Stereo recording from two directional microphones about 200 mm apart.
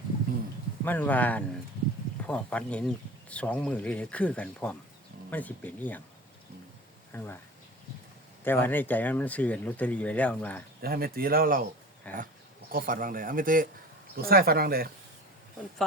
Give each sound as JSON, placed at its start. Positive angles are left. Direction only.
{"t": 0.9, "sound": "speech", "side_deg": 10}
{"t": 7.1, "sound": "speech", "side_deg": 10}
{"t": 8.4, "sound": "speech", "side_deg": 10}
{"t": 10.8, "sound": "speech", "side_deg": -50}
{"t": 12.1, "sound": "speech", "side_deg": 5}
{"t": 12.7, "sound": "speech", "side_deg": -45}